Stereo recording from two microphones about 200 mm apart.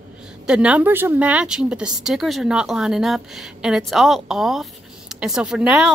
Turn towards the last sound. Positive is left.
turn(degrees=-5)  # may be behind; listen again after turning